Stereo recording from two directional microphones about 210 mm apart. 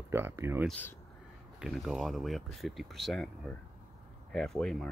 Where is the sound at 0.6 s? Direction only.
10° left (ahead or behind).